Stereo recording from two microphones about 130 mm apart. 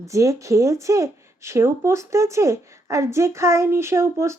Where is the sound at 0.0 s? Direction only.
25° right (ahead or behind).